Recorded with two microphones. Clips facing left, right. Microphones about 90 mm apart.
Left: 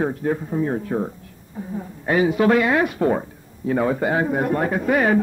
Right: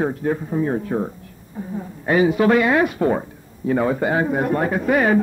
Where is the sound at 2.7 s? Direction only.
20° right (ahead or behind).